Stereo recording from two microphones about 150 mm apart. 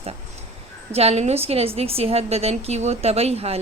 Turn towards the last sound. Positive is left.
turn(degrees=-45)  # may be behind; listen again after turning